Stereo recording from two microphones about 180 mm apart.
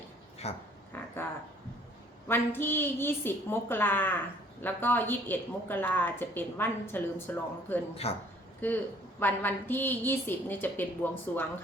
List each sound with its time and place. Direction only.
0.4 s a woman's voice: 35° left (ahead or behind)
0.9 s a woman's voice: 10° left (ahead or behind)
8.0 s a woman's voice: 35° left (ahead or behind)
8.6 s a woman's voice: 10° left (ahead or behind)